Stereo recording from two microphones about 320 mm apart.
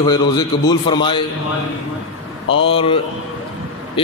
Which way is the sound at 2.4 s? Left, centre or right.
Left.